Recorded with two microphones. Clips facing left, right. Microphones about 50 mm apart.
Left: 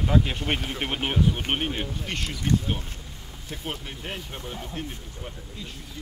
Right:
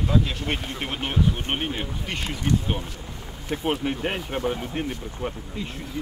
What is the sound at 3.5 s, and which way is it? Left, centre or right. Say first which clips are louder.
Speech: right 10 dB; right.